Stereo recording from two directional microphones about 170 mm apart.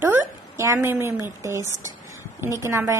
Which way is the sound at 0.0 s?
15° right (ahead or behind).